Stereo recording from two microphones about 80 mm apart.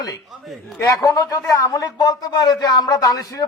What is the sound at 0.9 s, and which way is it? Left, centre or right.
Speech, left.